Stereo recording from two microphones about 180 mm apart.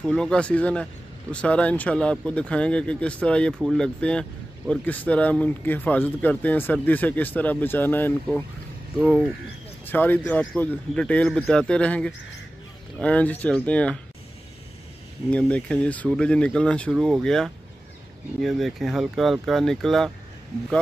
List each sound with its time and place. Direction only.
0.0 s speech: 5° left (ahead or behind)
8.9 s speech: 5° right (ahead or behind)
9.8 s speech: 10° left (ahead or behind)
15.3 s speech: 5° left (ahead or behind)